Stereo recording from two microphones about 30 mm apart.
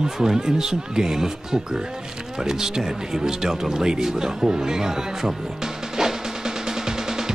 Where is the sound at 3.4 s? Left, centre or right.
Centre.